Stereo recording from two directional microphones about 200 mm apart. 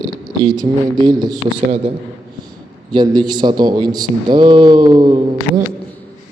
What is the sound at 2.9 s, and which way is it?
Speech, 20° right (ahead or behind).